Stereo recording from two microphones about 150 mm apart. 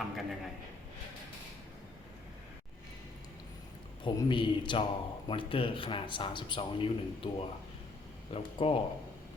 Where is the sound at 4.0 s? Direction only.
30° left (ahead or behind).